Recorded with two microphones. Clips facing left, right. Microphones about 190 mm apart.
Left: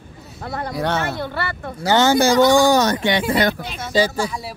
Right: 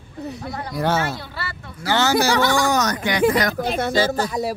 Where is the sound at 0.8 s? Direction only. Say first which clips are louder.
Right 1 dB; centre (ahead or behind).